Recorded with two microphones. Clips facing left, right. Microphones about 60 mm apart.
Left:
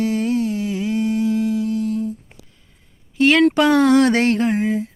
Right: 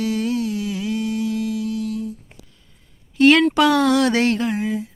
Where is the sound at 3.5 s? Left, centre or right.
Left.